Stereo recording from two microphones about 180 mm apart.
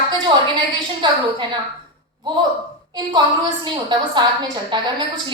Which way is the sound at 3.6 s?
25° right (ahead or behind).